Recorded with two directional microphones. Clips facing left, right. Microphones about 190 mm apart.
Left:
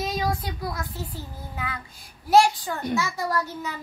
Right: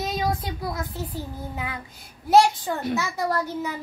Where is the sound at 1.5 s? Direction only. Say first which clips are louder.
Left 1 dB; 20° right (ahead or behind).